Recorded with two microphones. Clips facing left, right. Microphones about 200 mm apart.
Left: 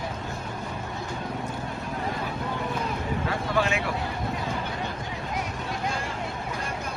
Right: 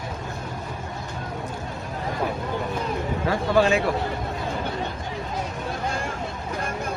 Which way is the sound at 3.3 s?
35° right (ahead or behind).